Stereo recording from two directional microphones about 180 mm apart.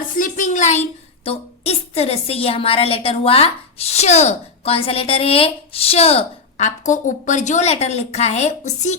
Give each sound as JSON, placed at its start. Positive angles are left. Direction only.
{"t": 0.2, "sound": "a woman's voice", "side_deg": 45}